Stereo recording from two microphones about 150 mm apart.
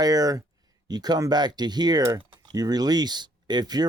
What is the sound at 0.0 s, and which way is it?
Speech, 25° right (ahead or behind).